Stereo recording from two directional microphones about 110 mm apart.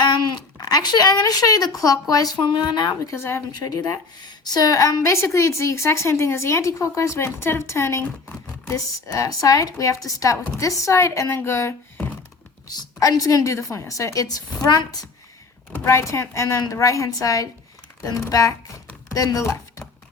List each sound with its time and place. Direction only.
0.0 s speech: 40° left (ahead or behind)
3.0 s a woman's voice: 25° left (ahead or behind)
3.5 s a woman's voice: 35° left (ahead or behind)